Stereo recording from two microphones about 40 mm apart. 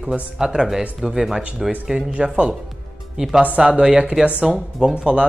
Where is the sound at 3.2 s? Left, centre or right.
Right.